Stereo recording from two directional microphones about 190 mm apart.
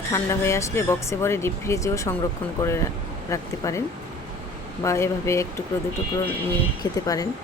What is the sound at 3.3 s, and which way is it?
Speech, 15° left (ahead or behind).